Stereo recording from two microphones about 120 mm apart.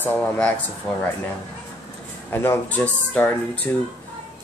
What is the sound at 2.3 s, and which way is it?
Speech, 20° left (ahead or behind).